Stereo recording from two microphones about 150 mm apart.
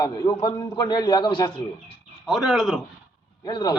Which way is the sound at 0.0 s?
25° left (ahead or behind).